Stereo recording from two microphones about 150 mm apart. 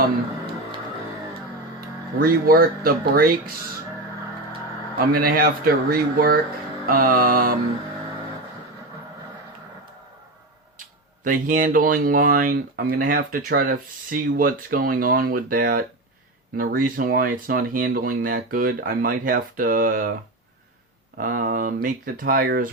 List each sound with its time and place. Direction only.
2.1 s speech: 75° right (ahead or behind)
4.9 s speech: 80° right
10.8 s speech: 65° right (ahead or behind)
21.2 s speech: 70° right (ahead or behind)